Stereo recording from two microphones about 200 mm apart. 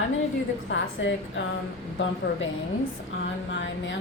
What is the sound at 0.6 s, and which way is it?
Speech, 65° left (ahead or behind).